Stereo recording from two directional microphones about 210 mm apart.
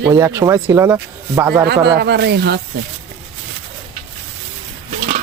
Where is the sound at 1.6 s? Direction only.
50° right (ahead or behind).